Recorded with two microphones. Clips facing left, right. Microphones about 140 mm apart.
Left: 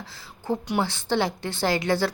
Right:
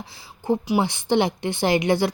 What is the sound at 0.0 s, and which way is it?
A woman's voice, 15° right (ahead or behind).